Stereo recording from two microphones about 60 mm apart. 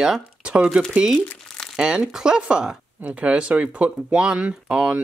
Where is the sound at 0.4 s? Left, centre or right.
Centre.